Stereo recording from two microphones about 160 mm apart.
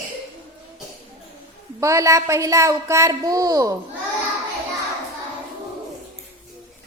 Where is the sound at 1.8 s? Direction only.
20° right (ahead or behind).